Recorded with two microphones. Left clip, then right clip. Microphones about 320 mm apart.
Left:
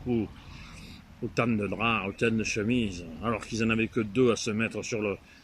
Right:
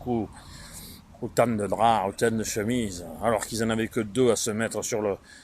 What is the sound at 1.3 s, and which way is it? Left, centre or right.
Speech, centre.